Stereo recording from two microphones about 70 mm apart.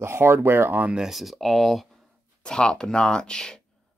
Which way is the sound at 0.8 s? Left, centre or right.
Centre.